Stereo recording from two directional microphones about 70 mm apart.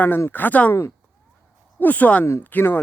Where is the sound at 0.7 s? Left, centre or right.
Left.